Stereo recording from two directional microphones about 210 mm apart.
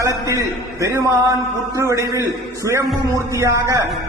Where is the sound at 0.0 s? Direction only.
15° right (ahead or behind).